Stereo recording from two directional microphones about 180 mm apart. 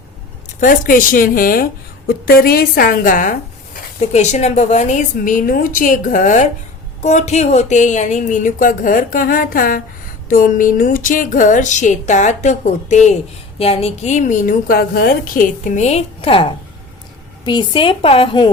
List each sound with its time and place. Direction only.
0.6 s a woman's voice: 50° left (ahead or behind); by 18.4 s 30° left (ahead or behind)